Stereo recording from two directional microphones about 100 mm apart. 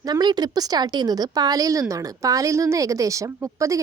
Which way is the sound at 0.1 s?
45° right (ahead or behind).